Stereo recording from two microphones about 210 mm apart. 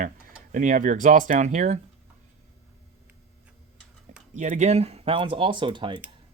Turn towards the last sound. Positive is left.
turn(degrees=-20)  # may be behind; listen again after turning